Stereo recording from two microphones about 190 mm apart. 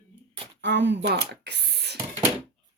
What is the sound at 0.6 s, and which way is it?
Speech, 70° right (ahead or behind).